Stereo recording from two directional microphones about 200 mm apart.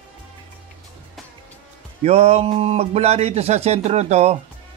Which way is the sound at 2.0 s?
30° right (ahead or behind).